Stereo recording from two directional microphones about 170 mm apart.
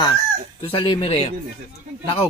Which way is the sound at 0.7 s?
30° left (ahead or behind).